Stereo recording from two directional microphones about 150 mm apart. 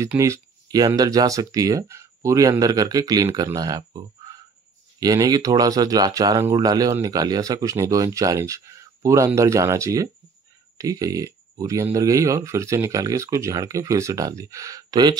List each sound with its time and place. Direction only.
0.0 s speech: 20° right (ahead or behind)